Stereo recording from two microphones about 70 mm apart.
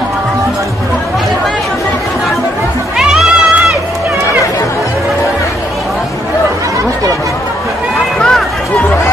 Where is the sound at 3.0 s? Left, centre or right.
Centre.